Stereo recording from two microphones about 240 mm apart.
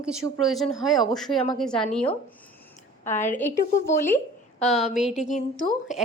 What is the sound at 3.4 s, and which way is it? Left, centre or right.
Speech, centre.